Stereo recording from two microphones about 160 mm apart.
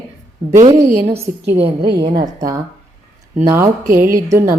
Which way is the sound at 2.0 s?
25° right (ahead or behind).